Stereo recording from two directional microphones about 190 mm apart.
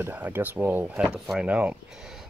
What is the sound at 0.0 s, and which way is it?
Speech, 10° right (ahead or behind).